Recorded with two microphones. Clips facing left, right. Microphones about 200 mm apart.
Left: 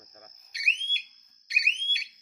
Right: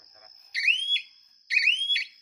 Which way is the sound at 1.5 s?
50° left (ahead or behind).